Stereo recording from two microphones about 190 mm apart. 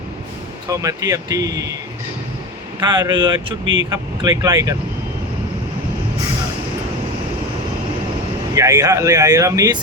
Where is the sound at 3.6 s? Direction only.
80° right.